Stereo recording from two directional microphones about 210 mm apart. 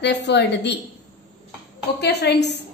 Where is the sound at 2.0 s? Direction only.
50° left (ahead or behind).